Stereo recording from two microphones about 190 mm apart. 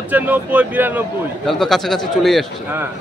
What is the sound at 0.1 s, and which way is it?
Speech, 10° right (ahead or behind).